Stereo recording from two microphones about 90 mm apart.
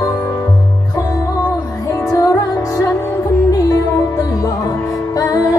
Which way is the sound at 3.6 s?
40° left (ahead or behind).